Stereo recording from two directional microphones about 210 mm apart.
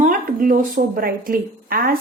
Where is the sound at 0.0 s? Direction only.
40° right (ahead or behind).